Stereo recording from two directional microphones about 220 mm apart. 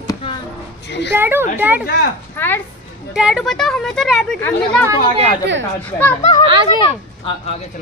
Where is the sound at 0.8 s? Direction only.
50° left (ahead or behind).